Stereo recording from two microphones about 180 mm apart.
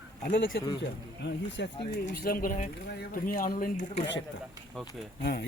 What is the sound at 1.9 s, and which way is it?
A man's voice, 60° left (ahead or behind).